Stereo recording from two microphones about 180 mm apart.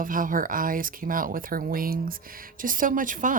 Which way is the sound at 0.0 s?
50° right (ahead or behind).